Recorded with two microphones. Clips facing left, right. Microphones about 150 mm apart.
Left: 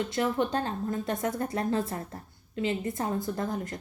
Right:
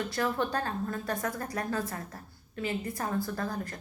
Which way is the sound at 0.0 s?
20° left (ahead or behind).